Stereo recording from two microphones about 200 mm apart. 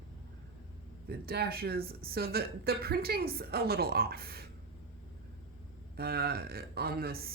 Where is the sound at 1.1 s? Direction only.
50° right (ahead or behind).